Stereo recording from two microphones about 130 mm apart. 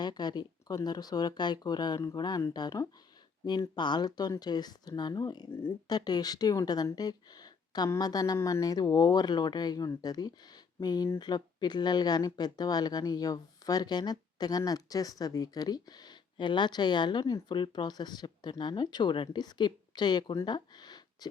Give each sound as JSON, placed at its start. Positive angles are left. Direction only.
{"t": 0.0, "sound": "speech", "side_deg": 35}